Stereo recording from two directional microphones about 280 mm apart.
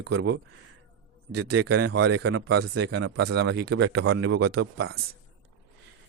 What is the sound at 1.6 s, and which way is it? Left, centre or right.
Speech, right.